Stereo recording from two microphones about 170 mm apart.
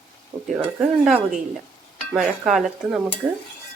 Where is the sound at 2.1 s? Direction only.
Centre (ahead or behind).